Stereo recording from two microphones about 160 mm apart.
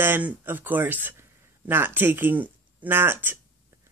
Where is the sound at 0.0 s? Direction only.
10° right (ahead or behind).